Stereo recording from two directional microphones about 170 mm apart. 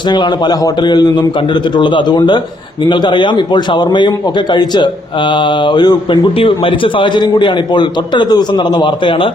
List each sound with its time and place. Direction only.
0.1 s a man's voice: 25° left (ahead or behind)